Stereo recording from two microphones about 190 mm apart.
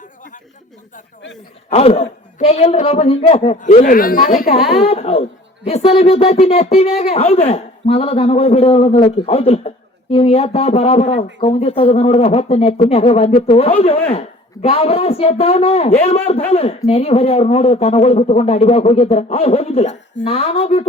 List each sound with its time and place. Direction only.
0.0 s chatter: 45° left (ahead or behind)
1.7 s speech: 30° left (ahead or behind); by 4.4 s 50° left (ahead or behind)
4.4 s speech: 30° left (ahead or behind)